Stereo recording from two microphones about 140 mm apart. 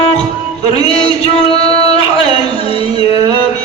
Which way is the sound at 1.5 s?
45° left (ahead or behind).